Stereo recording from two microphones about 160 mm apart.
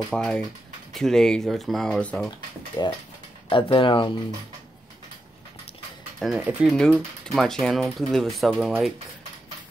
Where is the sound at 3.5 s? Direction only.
35° left (ahead or behind).